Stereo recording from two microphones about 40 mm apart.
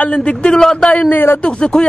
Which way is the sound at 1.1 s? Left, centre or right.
Left.